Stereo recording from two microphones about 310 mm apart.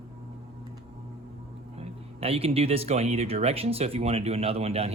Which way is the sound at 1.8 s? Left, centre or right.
Centre.